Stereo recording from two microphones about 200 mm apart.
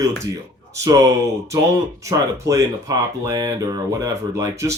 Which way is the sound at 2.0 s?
15° right (ahead or behind).